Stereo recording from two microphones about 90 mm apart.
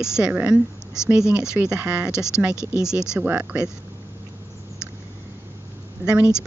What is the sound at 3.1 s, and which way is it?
Speech, 20° right (ahead or behind).